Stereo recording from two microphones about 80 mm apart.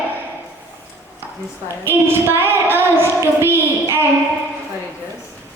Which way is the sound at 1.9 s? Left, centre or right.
Right.